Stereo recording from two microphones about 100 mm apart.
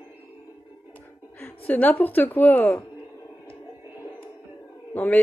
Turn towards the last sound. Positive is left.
turn(degrees=20)  # may be behind; listen again after turning